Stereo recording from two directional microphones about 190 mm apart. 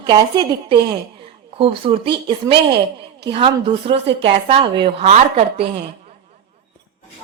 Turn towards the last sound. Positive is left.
turn(degrees=-35)  # may be behind; listen again after turning